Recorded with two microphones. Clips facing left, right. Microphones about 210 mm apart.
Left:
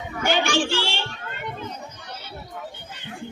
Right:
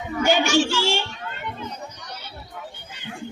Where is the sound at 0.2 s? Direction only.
55° left (ahead or behind).